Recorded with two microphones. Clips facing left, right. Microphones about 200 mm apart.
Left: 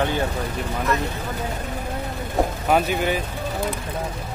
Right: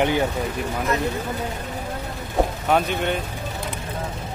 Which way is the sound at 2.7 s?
5° left (ahead or behind).